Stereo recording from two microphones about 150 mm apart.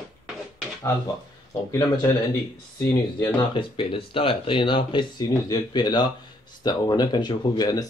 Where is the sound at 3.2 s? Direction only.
35° left (ahead or behind).